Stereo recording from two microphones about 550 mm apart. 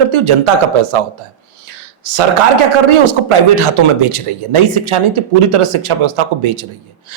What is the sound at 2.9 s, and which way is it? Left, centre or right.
Speech, right.